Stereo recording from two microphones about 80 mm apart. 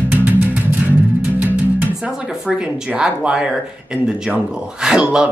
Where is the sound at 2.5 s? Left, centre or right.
Centre.